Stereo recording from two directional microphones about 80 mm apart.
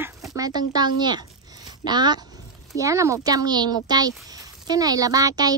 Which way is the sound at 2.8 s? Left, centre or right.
Right.